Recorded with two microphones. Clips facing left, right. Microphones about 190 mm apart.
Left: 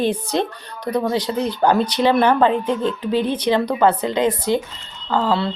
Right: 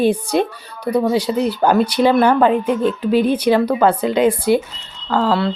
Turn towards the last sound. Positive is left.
turn(degrees=-5)  # may be behind; listen again after turning